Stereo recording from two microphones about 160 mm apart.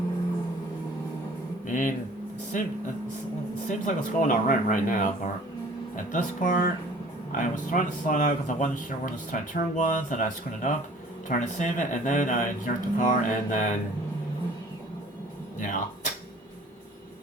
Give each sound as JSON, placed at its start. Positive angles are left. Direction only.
{"t": 1.6, "sound": "a sound", "side_deg": 55}
{"t": 2.5, "sound": "speech", "side_deg": 50}
{"t": 15.5, "sound": "music", "side_deg": 55}